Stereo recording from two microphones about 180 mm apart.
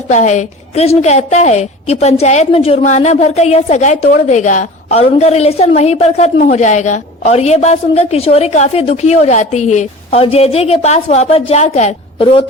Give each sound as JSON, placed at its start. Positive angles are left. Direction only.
{"t": 0.1, "sound": "a woman's voice", "side_deg": 40}